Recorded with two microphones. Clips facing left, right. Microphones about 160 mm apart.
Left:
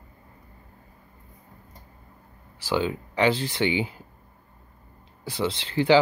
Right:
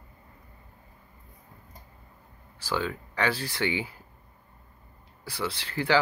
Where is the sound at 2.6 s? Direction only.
20° left (ahead or behind).